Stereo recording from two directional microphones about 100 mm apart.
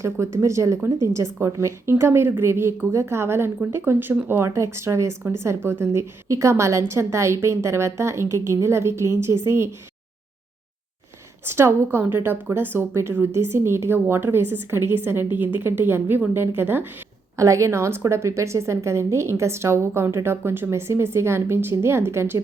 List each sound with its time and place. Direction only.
0.0 s speech: 30° right (ahead or behind)
11.4 s speech: 25° right (ahead or behind)
17.3 s speech: 30° right (ahead or behind)